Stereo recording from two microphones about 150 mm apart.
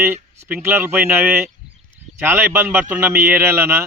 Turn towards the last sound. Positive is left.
turn(degrees=-15)  # may be behind; listen again after turning